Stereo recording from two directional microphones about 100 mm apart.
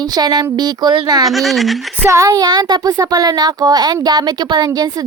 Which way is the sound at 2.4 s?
45° right (ahead or behind).